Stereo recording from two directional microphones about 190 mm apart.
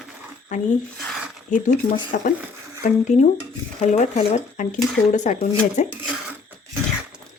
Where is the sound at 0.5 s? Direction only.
40° left (ahead or behind).